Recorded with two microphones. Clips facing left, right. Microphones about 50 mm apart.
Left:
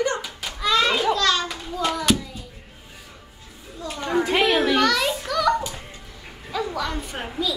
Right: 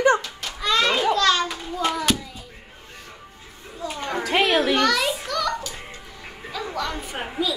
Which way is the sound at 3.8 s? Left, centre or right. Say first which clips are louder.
Left 3 dB; centre.